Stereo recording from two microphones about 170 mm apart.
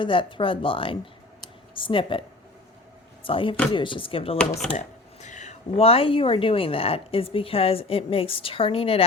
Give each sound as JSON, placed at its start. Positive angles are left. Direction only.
{"t": 0.0, "sound": "speech", "side_deg": 30}
{"t": 3.2, "sound": "speech", "side_deg": 30}
{"t": 4.8, "sound": "speech", "side_deg": 45}